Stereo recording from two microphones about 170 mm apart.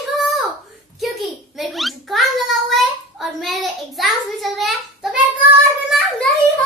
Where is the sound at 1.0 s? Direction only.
Centre (ahead or behind).